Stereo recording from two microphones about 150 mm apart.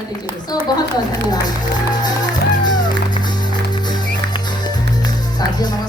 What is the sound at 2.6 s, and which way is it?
Music, 30° left (ahead or behind).